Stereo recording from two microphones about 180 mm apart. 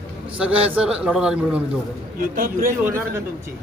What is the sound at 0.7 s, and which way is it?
Speech, 5° right (ahead or behind).